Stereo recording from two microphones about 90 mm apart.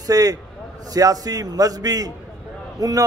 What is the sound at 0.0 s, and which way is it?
A man's voice, 45° right (ahead or behind).